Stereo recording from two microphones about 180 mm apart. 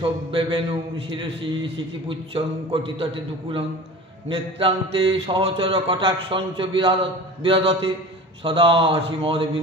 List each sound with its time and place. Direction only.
0.0 s a man's voice: 30° right (ahead or behind)